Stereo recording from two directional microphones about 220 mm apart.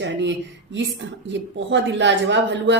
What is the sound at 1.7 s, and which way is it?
A woman's voice, 55° right (ahead or behind).